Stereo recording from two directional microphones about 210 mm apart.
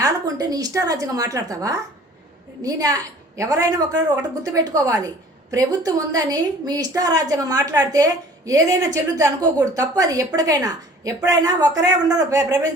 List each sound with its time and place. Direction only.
0.0 s a woman's voice: 15° right (ahead or behind)